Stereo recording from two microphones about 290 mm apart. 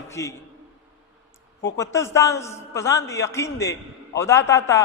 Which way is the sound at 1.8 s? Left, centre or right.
Centre.